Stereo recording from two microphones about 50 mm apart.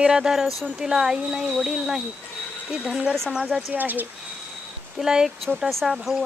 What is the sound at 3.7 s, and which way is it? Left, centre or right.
Speech, right.